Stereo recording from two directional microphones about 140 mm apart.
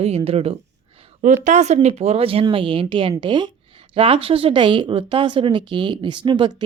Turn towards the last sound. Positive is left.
turn(degrees=-35)  # may be behind; listen again after turning